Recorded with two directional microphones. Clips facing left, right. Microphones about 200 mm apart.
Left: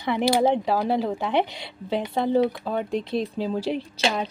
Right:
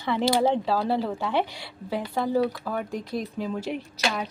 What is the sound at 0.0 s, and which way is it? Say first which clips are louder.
Speech: left 2 dB; 15° left (ahead or behind).